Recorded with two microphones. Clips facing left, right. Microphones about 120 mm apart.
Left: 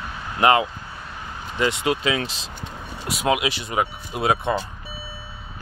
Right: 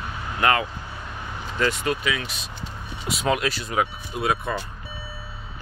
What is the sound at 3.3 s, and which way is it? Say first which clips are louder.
Speech: left 1 dB; 15° left (ahead or behind).